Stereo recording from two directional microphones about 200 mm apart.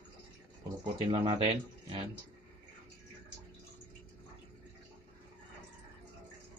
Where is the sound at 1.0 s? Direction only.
25° right (ahead or behind).